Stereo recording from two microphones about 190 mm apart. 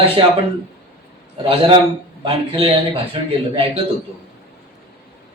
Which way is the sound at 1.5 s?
25° right (ahead or behind).